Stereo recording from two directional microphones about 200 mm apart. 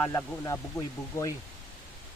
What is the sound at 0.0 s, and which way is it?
Speech, 10° left (ahead or behind).